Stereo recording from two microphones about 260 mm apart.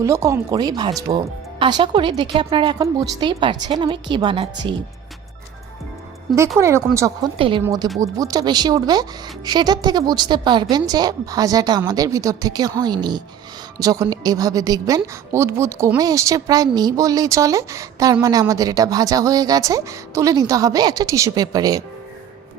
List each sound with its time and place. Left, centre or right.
0.0 s a woman's voice: centre
6.6 s a woman's voice: centre